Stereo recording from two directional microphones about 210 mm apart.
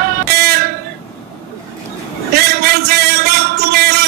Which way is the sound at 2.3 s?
50° right (ahead or behind).